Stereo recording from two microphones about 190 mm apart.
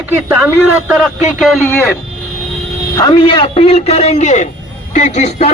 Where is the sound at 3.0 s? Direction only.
25° left (ahead or behind).